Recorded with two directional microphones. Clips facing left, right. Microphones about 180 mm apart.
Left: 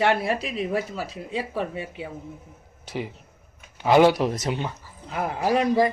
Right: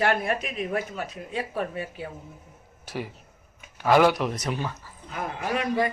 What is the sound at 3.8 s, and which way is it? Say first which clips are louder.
A woman's voice: left 3 dB; 25° left (ahead or behind).